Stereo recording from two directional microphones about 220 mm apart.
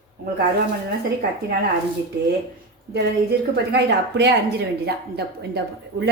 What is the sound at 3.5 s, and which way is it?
A woman's voice, 50° right (ahead or behind).